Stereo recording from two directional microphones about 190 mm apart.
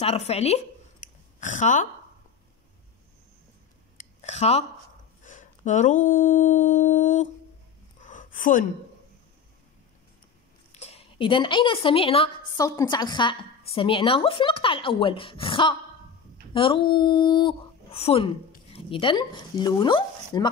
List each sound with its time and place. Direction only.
0.0 s speech: 30° left (ahead or behind)
4.2 s speech: 35° left (ahead or behind)
8.0 s a sound: 40° left (ahead or behind)
10.7 s a woman's voice: 35° left (ahead or behind)